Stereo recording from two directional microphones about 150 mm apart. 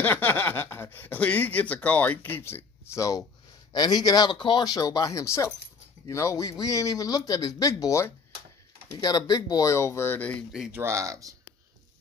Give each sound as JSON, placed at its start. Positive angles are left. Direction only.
{"t": 0.0, "sound": "speech", "side_deg": 15}
{"t": 10.5, "sound": "speech", "side_deg": -5}
{"t": 10.8, "sound": "speech", "side_deg": -20}